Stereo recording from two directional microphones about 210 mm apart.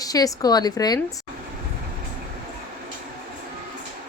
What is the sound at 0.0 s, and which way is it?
Speech, 15° left (ahead or behind).